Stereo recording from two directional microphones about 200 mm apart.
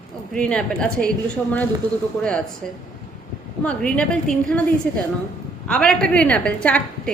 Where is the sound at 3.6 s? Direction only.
5° left (ahead or behind).